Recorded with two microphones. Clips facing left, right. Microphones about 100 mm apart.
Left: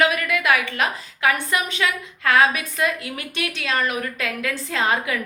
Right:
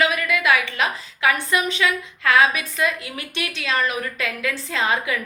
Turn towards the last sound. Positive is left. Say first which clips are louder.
# even
turn(degrees=40)  # may be behind; listen again after turning